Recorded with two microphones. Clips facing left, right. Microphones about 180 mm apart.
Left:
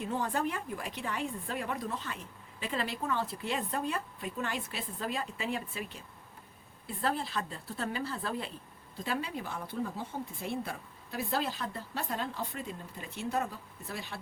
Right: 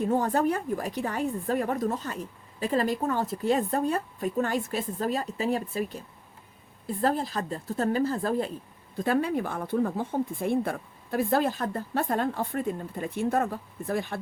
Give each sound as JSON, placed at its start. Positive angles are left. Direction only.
{"t": 0.0, "sound": "a woman's voice", "side_deg": -45}